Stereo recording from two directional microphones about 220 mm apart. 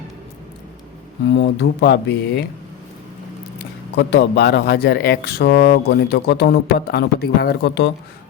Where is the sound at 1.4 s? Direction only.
50° left (ahead or behind).